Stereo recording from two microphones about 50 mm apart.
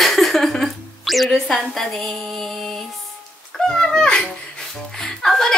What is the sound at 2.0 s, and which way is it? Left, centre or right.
Speech, centre.